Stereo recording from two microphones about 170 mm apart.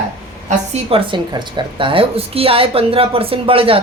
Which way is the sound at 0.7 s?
35° right (ahead or behind).